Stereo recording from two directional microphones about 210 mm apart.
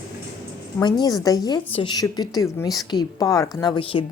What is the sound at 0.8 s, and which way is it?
A woman's voice, 20° left (ahead or behind).